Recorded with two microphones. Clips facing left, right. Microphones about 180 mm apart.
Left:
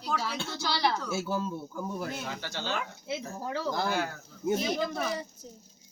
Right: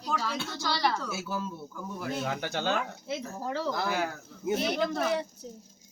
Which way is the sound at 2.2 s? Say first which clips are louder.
Right 5 dB; 55° right (ahead or behind).